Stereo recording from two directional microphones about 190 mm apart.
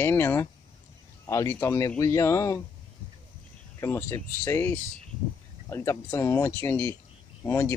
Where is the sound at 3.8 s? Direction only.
15° left (ahead or behind).